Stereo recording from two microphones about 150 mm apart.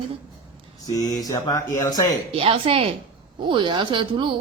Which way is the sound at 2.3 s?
40° right (ahead or behind).